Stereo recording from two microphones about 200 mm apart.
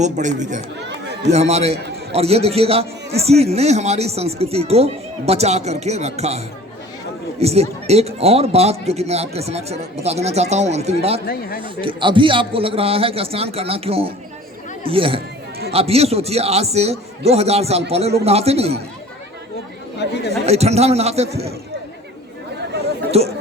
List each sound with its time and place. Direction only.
0.0 s a man's voice: 35° right (ahead or behind)
0.9 s chatter: 55° right (ahead or behind)
1.3 s a man's voice: 35° right (ahead or behind)
11.3 s speech: 50° left (ahead or behind)
11.6 s a man's voice: 25° right (ahead or behind)
20.0 s speech: 55° left (ahead or behind)
20.4 s a man's voice: 30° right (ahead or behind)
23.1 s a man's voice: 30° right (ahead or behind)